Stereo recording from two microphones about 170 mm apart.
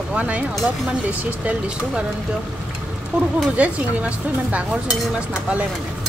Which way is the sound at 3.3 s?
10° right (ahead or behind).